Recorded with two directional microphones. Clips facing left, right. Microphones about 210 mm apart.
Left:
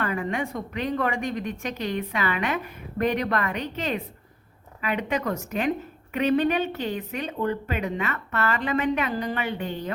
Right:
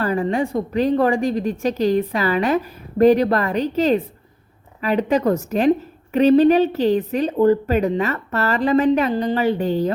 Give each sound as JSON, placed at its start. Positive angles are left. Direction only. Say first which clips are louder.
{"t": 0.0, "sound": "a woman's voice", "louder": "right 7 dB", "side_deg": -35}